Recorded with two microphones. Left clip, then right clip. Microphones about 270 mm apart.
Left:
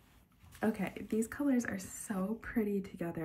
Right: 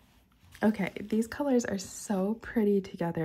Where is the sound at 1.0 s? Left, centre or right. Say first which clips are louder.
Right 3 dB; centre.